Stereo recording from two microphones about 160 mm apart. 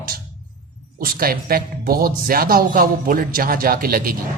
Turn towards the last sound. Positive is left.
turn(degrees=-65)  # may be behind; listen again after turning